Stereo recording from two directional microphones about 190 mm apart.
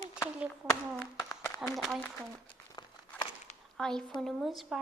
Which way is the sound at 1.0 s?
10° left (ahead or behind).